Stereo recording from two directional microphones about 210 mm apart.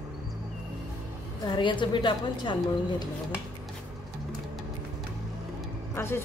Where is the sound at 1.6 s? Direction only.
20° left (ahead or behind).